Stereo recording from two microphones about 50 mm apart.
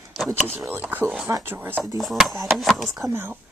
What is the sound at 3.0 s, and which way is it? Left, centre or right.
Speech, right.